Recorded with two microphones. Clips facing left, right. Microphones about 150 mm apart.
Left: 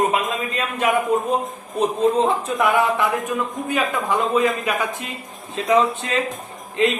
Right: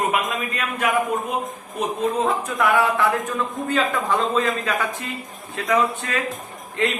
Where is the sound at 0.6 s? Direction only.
25° left (ahead or behind).